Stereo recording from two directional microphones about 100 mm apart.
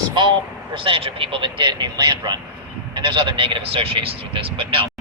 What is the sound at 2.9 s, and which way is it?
Speech, 55° right (ahead or behind).